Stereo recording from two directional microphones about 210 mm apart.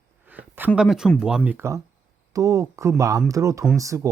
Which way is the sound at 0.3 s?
10° right (ahead or behind).